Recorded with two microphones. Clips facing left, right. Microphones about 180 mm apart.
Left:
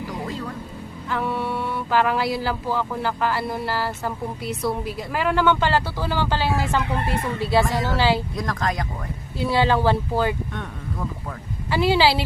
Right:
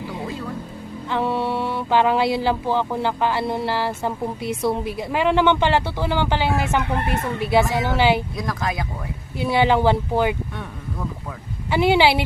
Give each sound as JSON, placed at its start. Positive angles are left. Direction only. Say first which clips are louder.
{"t": 0.0, "sound": "music", "louder": "even", "side_deg": -20}
{"t": 1.0, "sound": "speech", "louder": "right 3 dB", "side_deg": -25}
{"t": 8.4, "sound": "speech", "louder": "even", "side_deg": -5}
{"t": 9.4, "sound": "speech", "louder": "right 2 dB", "side_deg": -20}
{"t": 11.7, "sound": "speech", "louder": "right 2 dB", "side_deg": -20}